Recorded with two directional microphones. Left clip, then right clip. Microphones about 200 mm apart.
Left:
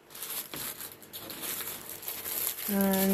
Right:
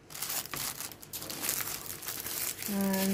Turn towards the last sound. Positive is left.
turn(degrees=20)  # may be behind; listen again after turning